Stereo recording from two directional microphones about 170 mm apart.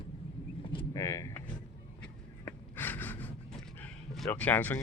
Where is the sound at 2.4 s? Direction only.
10° left (ahead or behind).